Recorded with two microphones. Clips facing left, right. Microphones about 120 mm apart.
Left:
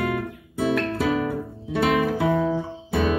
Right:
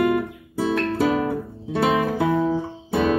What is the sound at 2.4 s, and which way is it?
Guitar, 30° right (ahead or behind).